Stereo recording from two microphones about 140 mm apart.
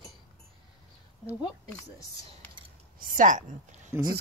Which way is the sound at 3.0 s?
75° right (ahead or behind).